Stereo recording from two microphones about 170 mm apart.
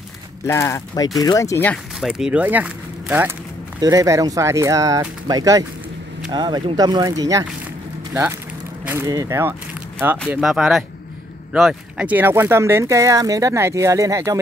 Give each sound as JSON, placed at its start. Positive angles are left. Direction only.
{"t": 0.5, "sound": "speech", "side_deg": 15}
{"t": 2.0, "sound": "speech", "side_deg": -5}
{"t": 10.3, "sound": "speech", "side_deg": 0}